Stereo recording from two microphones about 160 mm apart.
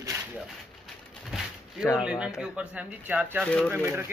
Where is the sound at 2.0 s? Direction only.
5° right (ahead or behind).